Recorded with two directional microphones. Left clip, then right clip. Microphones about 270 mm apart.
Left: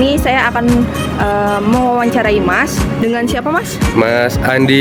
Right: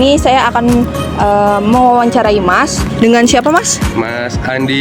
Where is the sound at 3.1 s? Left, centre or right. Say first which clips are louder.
Right 9 dB; right.